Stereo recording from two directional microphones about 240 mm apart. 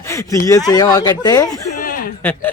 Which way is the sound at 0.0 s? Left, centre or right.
Centre.